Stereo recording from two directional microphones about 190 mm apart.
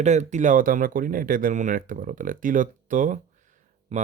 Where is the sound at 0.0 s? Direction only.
40° right (ahead or behind).